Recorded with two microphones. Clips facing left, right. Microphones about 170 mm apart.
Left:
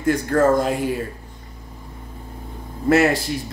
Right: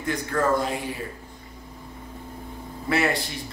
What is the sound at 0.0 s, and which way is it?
Speech, 50° left (ahead or behind).